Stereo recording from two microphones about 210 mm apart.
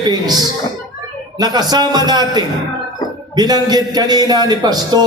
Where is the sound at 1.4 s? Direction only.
20° right (ahead or behind).